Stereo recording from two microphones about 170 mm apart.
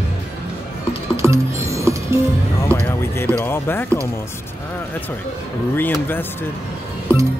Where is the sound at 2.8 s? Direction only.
10° left (ahead or behind).